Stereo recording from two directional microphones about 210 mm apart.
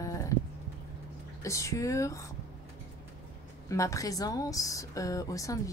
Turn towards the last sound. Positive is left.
turn(degrees=15)  # may be behind; listen again after turning